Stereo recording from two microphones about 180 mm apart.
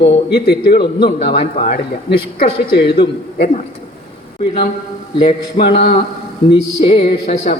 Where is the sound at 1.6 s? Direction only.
35° left (ahead or behind).